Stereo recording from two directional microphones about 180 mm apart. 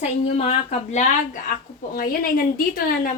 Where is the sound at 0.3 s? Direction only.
35° left (ahead or behind).